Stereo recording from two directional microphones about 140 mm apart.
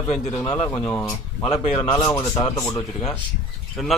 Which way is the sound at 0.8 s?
15° left (ahead or behind).